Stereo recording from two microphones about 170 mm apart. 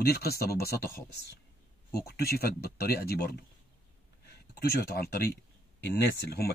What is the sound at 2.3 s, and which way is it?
Speech, 65° left (ahead or behind).